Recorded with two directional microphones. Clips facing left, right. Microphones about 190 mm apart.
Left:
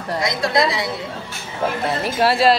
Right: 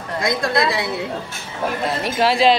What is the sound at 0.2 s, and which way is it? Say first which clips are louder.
Speech: even; 55° right (ahead or behind).